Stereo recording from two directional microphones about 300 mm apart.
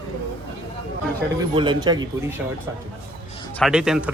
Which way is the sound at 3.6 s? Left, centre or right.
Centre.